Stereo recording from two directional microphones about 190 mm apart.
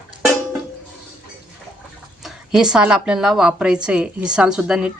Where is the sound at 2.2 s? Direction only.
5° right (ahead or behind).